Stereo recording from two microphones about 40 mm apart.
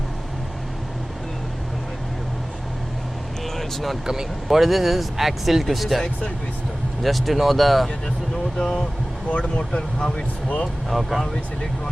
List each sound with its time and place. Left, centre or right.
3.4 s vehicle: centre
4.0 s speech: centre
4.4 s speech: centre
7.0 s speech: centre
8.5 s speech: left
10.8 s speech: centre